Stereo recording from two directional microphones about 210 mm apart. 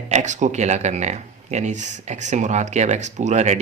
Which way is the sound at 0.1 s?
35° right (ahead or behind).